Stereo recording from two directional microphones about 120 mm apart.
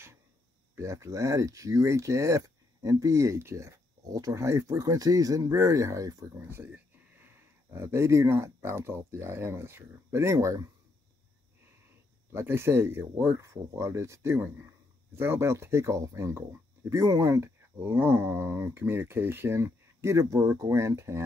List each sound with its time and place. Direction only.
0.7 s speech: 25° right (ahead or behind)
12.3 s speech: 20° right (ahead or behind)